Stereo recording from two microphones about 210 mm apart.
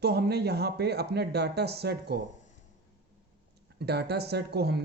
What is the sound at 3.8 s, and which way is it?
A man's voice, 50° right (ahead or behind).